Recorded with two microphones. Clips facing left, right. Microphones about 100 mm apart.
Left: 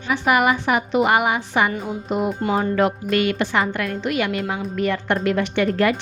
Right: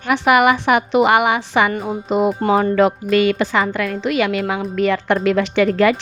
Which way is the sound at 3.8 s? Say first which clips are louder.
Right 4 dB; 90° right.